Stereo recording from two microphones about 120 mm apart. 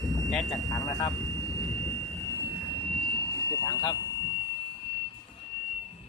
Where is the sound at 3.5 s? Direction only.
30° left (ahead or behind).